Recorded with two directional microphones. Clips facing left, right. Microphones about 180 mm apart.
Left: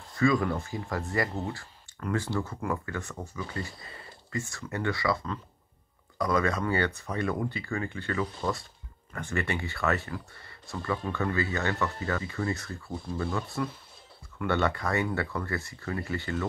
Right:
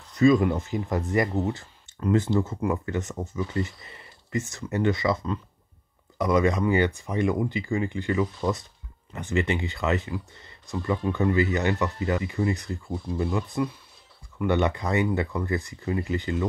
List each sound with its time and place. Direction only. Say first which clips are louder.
0.1 s speech: right 6 dB; 20° right (ahead or behind)